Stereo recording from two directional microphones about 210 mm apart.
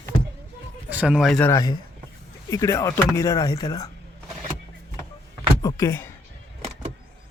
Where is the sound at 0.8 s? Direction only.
5° right (ahead or behind); by 3.8 s 15° left (ahead or behind).